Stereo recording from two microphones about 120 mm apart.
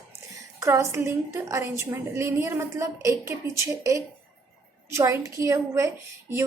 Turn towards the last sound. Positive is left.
turn(degrees=-25)  # may be behind; listen again after turning